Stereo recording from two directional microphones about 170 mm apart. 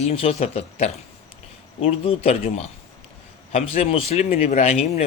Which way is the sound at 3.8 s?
35° left (ahead or behind).